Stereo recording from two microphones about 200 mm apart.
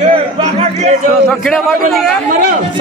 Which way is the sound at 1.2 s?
Centre (ahead or behind).